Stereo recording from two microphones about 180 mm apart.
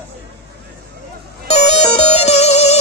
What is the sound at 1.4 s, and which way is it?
Music, 35° left (ahead or behind).